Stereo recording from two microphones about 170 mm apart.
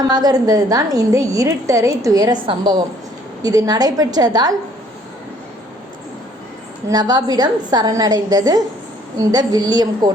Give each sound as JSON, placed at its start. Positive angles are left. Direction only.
{"t": 0.1, "sound": "a woman's voice", "side_deg": -20}
{"t": 6.8, "sound": "a woman's voice", "side_deg": -25}